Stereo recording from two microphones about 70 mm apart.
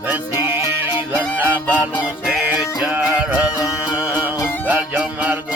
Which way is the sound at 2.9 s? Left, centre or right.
Right.